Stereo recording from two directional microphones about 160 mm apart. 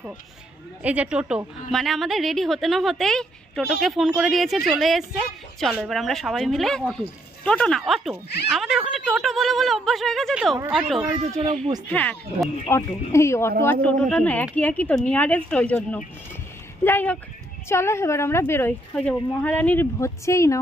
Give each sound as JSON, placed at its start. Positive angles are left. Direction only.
{"t": 0.8, "sound": "a woman's voice", "side_deg": -10}
{"t": 13.8, "sound": "a woman's voice", "side_deg": 5}